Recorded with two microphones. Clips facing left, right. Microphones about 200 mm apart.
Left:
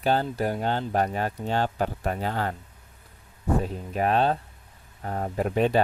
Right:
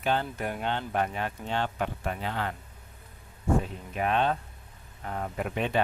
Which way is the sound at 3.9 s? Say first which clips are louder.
Left 3 dB; 40° left (ahead or behind).